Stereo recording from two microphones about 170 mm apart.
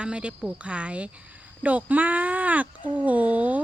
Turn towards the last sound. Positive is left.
turn(degrees=-10)  # may be behind; listen again after turning